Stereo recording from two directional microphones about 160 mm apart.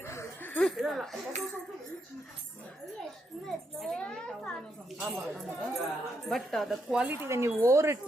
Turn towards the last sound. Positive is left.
turn(degrees=-15)  # may be behind; listen again after turning